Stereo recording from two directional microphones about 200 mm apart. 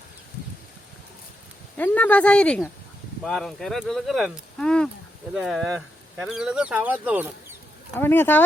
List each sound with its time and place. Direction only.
1.7 s speech: 5° left (ahead or behind); by 7.3 s 10° right (ahead or behind)
7.9 s speech: 10° left (ahead or behind)